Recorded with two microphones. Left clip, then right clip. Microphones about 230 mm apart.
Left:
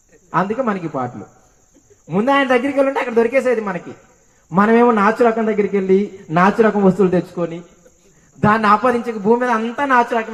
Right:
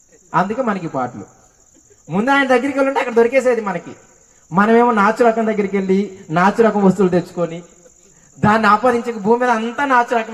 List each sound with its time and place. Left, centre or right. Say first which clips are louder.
0.3 s a man's voice: right 1 dB; right